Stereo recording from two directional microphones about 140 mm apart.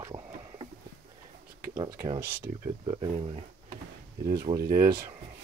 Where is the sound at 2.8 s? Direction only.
40° right (ahead or behind).